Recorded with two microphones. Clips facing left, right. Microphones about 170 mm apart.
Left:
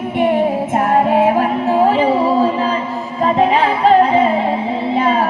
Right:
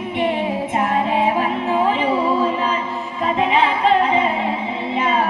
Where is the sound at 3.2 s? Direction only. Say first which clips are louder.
Left 4 dB; 40° left (ahead or behind).